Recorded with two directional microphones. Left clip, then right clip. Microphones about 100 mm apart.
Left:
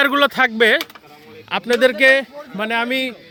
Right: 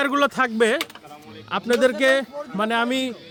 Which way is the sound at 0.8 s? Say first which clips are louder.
Left 1 dB; 60° left (ahead or behind).